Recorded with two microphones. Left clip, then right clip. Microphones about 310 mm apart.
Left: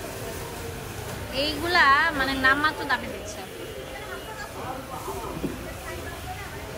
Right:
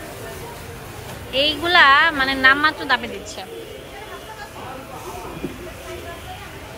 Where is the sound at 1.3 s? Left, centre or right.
Centre.